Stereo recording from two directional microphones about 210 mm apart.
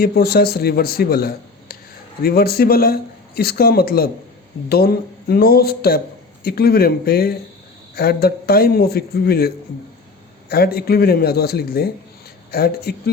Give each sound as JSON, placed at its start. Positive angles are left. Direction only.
{"t": 0.0, "sound": "a man's voice", "side_deg": 45}
{"t": 10.5, "sound": "a man's voice", "side_deg": 45}